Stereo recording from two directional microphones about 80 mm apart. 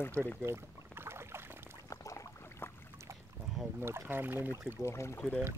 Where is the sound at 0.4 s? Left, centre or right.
Right.